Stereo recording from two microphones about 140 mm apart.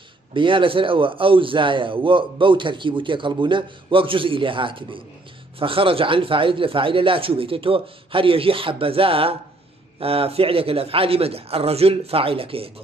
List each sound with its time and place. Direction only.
0.3 s a man's voice: 35° right (ahead or behind)